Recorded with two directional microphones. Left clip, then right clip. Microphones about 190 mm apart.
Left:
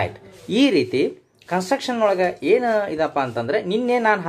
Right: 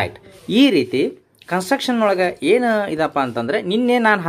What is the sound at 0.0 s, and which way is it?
Speech, 20° right (ahead or behind).